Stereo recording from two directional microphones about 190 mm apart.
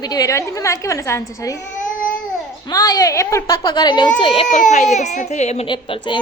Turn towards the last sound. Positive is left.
turn(degrees=25)  # may be behind; listen again after turning